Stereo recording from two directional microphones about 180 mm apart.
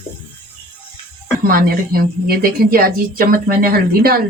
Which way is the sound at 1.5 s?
55° right (ahead or behind).